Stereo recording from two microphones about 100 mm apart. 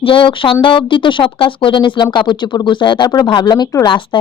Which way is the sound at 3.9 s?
55° left (ahead or behind).